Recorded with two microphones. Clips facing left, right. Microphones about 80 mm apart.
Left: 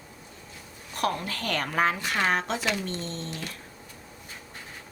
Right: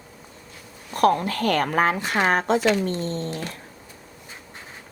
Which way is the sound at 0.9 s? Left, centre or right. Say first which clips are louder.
Right 9 dB; right.